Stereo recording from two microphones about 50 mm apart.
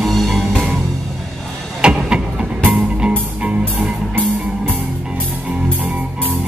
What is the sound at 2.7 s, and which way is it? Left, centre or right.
Music, centre.